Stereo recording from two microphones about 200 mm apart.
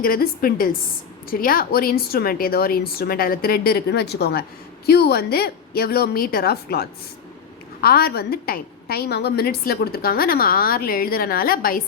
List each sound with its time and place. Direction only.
0.0 s a woman's voice: 45° left (ahead or behind)